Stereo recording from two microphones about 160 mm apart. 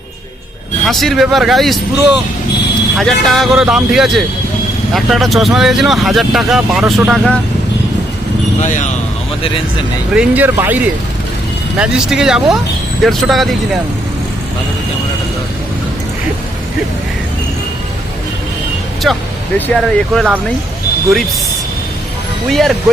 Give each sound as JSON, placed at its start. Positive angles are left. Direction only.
{"t": 0.9, "sound": "speech", "side_deg": 0}
{"t": 3.0, "sound": "speech", "side_deg": 0}
{"t": 8.6, "sound": "speech", "side_deg": 50}
{"t": 10.1, "sound": "speech", "side_deg": -10}
{"t": 19.1, "sound": "speech", "side_deg": 0}
{"t": 22.4, "sound": "speech", "side_deg": 0}